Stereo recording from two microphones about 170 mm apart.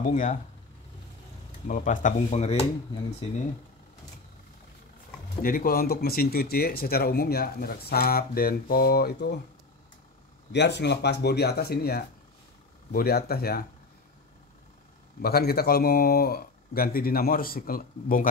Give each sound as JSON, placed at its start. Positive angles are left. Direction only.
{"t": 0.1, "sound": "speech", "side_deg": 50}
{"t": 1.7, "sound": "speech", "side_deg": 50}
{"t": 5.4, "sound": "speech", "side_deg": 55}
{"t": 10.5, "sound": "speech", "side_deg": 90}
{"t": 15.2, "sound": "speech", "side_deg": 65}